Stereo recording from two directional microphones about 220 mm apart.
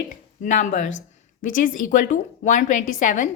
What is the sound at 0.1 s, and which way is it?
A woman's voice, 35° left (ahead or behind).